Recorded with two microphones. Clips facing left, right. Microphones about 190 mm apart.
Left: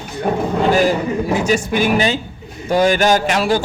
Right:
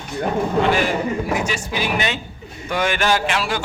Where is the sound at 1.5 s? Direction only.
50° left (ahead or behind).